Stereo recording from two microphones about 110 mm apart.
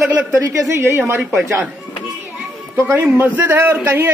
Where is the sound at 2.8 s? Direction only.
15° right (ahead or behind).